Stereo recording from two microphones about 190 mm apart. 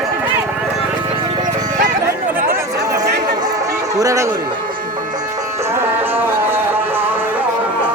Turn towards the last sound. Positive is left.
turn(degrees=-10)  # may be behind; listen again after turning